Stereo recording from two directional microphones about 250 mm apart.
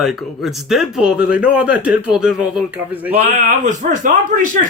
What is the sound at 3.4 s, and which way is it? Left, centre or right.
Speech, right.